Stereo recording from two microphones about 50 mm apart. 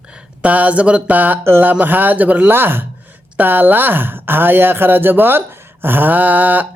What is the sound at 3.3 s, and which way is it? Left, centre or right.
Speech, right.